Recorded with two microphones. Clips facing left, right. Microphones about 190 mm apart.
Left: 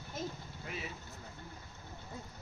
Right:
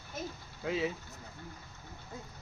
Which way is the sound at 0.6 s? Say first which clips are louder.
Right 12 dB; 90° right.